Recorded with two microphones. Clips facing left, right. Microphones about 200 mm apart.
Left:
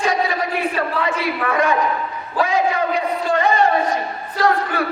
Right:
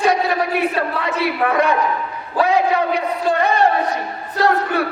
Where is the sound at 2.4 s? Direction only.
65° right (ahead or behind).